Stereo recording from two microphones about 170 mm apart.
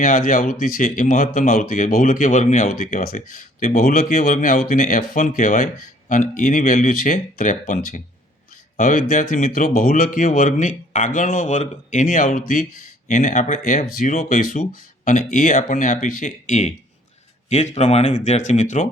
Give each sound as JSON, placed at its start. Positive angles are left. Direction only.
{"t": 0.0, "sound": "speech", "side_deg": 50}